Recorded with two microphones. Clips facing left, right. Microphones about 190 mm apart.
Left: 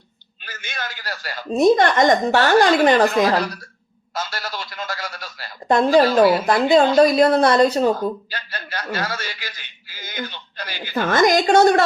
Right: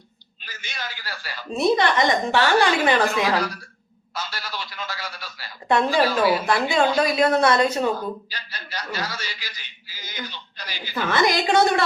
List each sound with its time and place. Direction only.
0.4 s a woman's voice: 55° left (ahead or behind); by 7.8 s 35° left (ahead or behind)
8.3 s a woman's voice: 55° left (ahead or behind)